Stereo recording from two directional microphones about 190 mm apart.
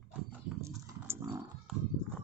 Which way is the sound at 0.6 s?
15° right (ahead or behind).